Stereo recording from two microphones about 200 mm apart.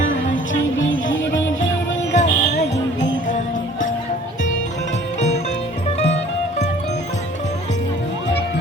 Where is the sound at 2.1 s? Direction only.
35° left (ahead or behind).